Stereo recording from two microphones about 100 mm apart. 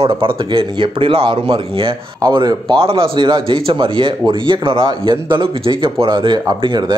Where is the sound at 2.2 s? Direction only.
45° right (ahead or behind).